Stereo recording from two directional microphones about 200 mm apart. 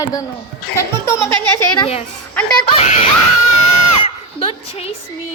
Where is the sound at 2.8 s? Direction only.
35° left (ahead or behind).